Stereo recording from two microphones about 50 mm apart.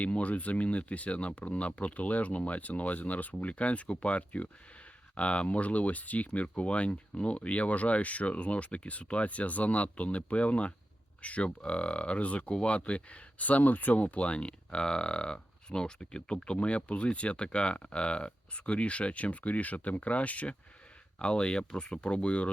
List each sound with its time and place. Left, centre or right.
0.0 s speech: left